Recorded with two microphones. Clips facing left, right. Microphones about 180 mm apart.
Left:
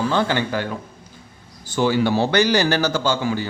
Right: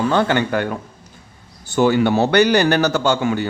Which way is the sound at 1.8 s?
60° right (ahead or behind).